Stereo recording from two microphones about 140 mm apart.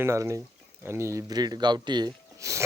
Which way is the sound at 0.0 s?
20° right (ahead or behind).